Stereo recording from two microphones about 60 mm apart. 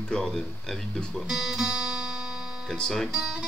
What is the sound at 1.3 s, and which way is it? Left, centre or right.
Music, centre.